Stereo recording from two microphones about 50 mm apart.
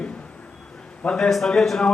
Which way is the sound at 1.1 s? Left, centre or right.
Centre.